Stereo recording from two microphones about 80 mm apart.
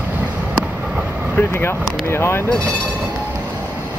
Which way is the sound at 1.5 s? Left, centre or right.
Left.